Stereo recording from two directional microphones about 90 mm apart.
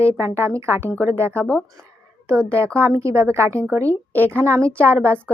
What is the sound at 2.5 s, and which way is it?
A woman's voice, 30° right (ahead or behind).